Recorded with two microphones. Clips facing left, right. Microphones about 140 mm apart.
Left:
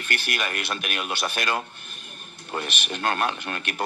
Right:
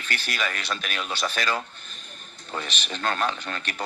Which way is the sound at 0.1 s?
60° left (ahead or behind).